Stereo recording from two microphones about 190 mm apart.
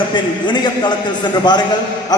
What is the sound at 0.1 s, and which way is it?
A man's voice, 25° left (ahead or behind).